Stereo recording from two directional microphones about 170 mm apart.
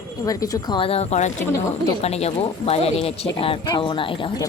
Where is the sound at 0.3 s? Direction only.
20° left (ahead or behind).